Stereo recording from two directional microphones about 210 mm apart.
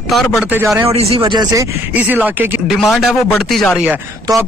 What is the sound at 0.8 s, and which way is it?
Speech, 30° right (ahead or behind).